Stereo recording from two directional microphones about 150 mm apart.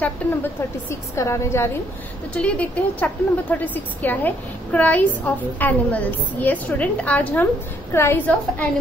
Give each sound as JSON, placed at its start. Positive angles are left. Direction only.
{"t": 0.2, "sound": "a woman's voice", "side_deg": 10}